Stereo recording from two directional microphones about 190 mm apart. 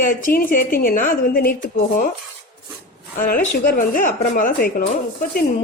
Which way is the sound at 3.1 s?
45° left (ahead or behind).